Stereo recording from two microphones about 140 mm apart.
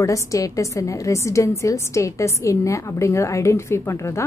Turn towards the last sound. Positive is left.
turn(degrees=20)  # may be behind; listen again after turning